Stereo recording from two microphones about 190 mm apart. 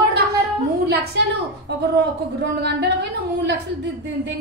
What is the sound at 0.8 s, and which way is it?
A woman's voice, 65° right (ahead or behind).